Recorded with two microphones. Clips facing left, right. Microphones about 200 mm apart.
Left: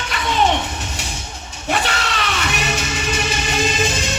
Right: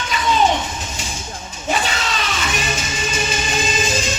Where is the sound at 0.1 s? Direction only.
65° left (ahead or behind).